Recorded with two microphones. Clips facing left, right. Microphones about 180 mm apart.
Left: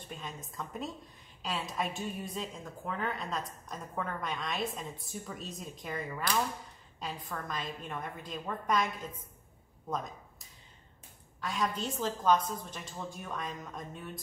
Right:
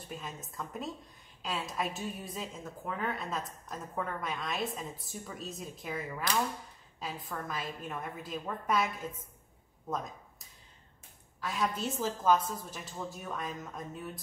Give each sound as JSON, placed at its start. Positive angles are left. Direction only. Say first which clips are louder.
{"t": 0.1, "sound": "a woman's voice", "louder": "right 1 dB", "side_deg": 0}
{"t": 11.4, "sound": "a woman's voice", "louder": "even", "side_deg": 0}